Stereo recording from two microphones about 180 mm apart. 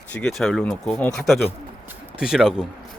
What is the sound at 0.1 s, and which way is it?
Speech, 5° left (ahead or behind).